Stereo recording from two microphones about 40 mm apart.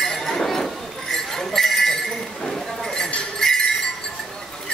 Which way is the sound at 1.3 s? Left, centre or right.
Centre.